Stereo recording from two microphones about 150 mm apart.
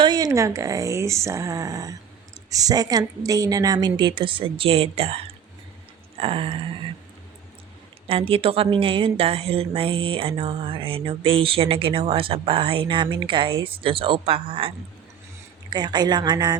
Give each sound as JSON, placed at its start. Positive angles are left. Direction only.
{"t": 0.0, "sound": "a woman's voice", "side_deg": -25}
{"t": 8.0, "sound": "a woman's voice", "side_deg": -40}
{"t": 15.7, "sound": "speech", "side_deg": -30}